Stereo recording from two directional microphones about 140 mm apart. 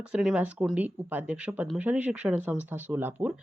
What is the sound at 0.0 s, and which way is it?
Speech, 5° right (ahead or behind).